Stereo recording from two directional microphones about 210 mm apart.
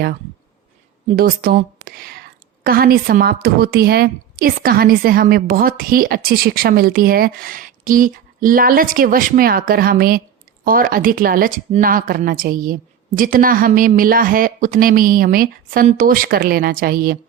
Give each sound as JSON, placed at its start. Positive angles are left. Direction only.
{"t": 1.1, "sound": "a woman's voice", "side_deg": -45}